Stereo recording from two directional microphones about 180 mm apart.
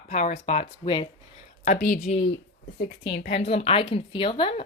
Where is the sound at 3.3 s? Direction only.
35° left (ahead or behind).